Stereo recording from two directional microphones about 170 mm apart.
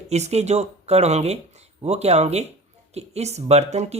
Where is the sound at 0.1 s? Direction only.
40° right (ahead or behind).